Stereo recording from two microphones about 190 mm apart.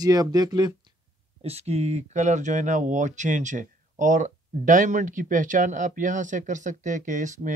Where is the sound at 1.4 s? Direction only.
35° right (ahead or behind).